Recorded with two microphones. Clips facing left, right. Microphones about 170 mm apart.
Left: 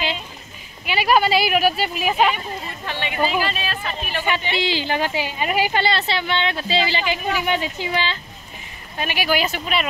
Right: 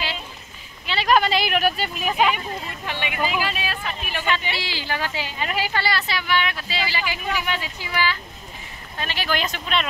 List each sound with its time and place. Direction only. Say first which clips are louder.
0.8 s speech: left 2 dB; 10° left (ahead or behind)
2.3 s speech: left 1 dB; 10° right (ahead or behind)
4.6 s a woman's voice: left 7 dB; 20° left (ahead or behind); by 9.8 s 5° left (ahead or behind)